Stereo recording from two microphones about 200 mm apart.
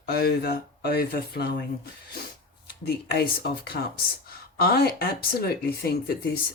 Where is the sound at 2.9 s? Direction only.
50° left (ahead or behind).